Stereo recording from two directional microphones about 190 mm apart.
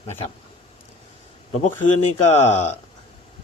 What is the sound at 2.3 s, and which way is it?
Speech, 35° left (ahead or behind).